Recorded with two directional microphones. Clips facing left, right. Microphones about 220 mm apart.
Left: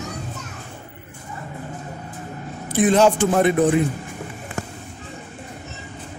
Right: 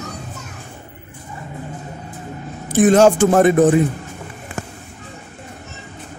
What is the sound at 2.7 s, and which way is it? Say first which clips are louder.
Speech: right 4 dB; 45° right (ahead or behind).